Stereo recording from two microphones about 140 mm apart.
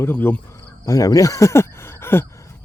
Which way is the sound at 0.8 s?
25° left (ahead or behind).